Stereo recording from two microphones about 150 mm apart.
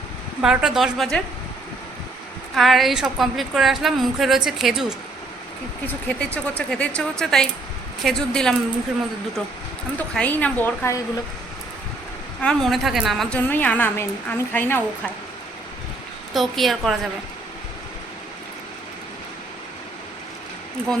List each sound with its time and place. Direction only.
0.4 s a woman's voice: 5° right (ahead or behind)
2.6 s a woman's voice: centre (ahead or behind)
5.8 s a woman's voice: 10° left (ahead or behind)
10.2 s a woman's voice: 10° left (ahead or behind)
12.4 s a woman's voice: 5° left (ahead or behind)
13.5 s a woman's voice: 10° left (ahead or behind)
16.3 s a woman's voice: centre (ahead or behind)